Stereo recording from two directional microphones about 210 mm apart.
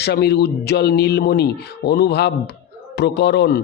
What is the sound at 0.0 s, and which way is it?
Speech, 50° left (ahead or behind).